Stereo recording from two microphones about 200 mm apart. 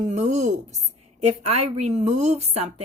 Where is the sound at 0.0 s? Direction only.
35° right (ahead or behind).